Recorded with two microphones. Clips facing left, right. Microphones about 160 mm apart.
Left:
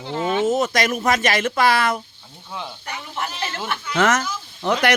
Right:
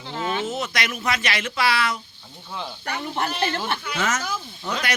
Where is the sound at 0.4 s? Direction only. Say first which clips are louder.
Left 8 dB; 45° left (ahead or behind).